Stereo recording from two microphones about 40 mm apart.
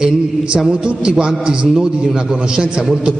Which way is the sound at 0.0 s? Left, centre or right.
Right.